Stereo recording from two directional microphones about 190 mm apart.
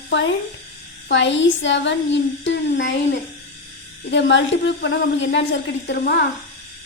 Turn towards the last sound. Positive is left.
turn(degrees=60)  # may be behind; listen again after turning